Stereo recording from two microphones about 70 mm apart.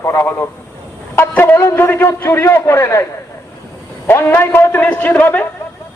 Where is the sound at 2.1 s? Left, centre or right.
Left.